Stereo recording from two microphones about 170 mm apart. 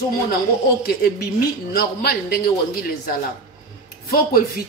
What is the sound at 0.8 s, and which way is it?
A man's voice, 65° left (ahead or behind).